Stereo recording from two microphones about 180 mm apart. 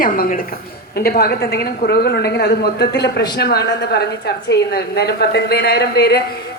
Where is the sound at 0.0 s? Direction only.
50° left (ahead or behind).